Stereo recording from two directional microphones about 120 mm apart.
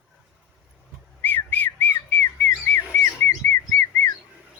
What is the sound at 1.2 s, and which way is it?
Whistling, 15° left (ahead or behind).